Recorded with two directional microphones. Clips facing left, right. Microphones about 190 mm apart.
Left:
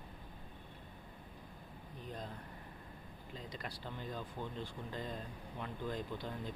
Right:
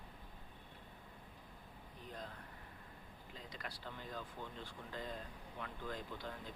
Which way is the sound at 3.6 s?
20° left (ahead or behind).